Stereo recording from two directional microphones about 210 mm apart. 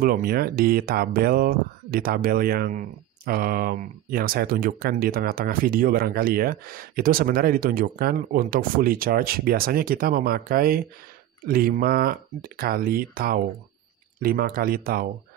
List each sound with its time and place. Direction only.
0.0 s speech: 45° right (ahead or behind)